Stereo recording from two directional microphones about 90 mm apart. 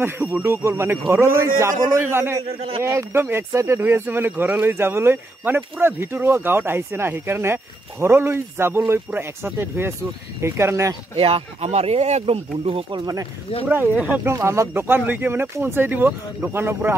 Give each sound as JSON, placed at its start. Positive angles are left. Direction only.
{"t": 0.0, "sound": "speech", "side_deg": -30}
{"t": 2.4, "sound": "speech", "side_deg": -90}
{"t": 2.8, "sound": "speech", "side_deg": -30}
{"t": 11.1, "sound": "speech", "side_deg": -90}
{"t": 13.0, "sound": "speech", "side_deg": -40}
{"t": 13.7, "sound": "speech", "side_deg": -15}
{"t": 14.4, "sound": "speech", "side_deg": -30}